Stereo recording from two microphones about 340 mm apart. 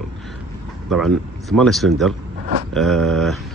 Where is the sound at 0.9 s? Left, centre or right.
Centre.